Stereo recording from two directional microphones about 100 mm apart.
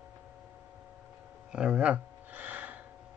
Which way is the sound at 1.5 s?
10° right (ahead or behind).